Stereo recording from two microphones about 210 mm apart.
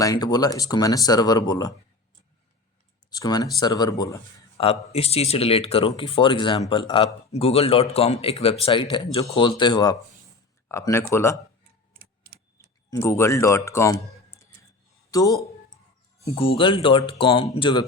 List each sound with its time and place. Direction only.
0.0 s speech: 20° left (ahead or behind)
3.1 s speech: 20° left (ahead or behind)
11.9 s clock: 45° right (ahead or behind)
12.9 s speech: 10° left (ahead or behind)